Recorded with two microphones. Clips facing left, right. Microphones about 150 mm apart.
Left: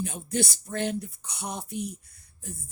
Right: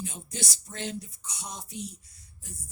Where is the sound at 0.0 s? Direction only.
60° left (ahead or behind).